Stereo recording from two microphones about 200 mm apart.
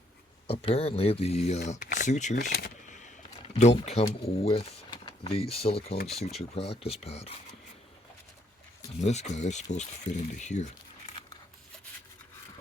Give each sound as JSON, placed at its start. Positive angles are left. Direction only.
{"t": 0.4, "sound": "speech", "side_deg": 30}
{"t": 2.5, "sound": "speech", "side_deg": 55}
{"t": 2.9, "sound": "speech", "side_deg": 35}
{"t": 6.1, "sound": "speech", "side_deg": 0}
{"t": 6.5, "sound": "speech", "side_deg": 30}
{"t": 9.0, "sound": "speech", "side_deg": 35}